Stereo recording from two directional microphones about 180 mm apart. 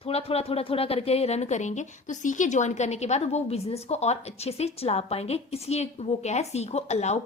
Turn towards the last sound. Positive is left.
turn(degrees=40)  # may be behind; listen again after turning